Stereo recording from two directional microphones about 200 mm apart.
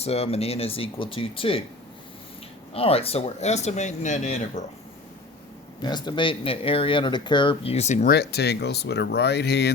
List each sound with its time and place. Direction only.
0.0 s speech: 30° left (ahead or behind)
2.7 s speech: 30° left (ahead or behind)
5.8 s speech: 20° left (ahead or behind)
8.1 s speech: 55° left (ahead or behind)